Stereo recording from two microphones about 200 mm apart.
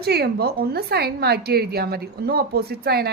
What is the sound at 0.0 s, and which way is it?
Speech, 50° right (ahead or behind).